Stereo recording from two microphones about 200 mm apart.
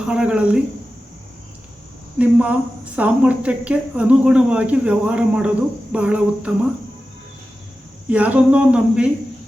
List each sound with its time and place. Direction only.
0.0 s speech: 5° right (ahead or behind)
2.1 s speech: 5° right (ahead or behind)
8.1 s speech: 5° right (ahead or behind)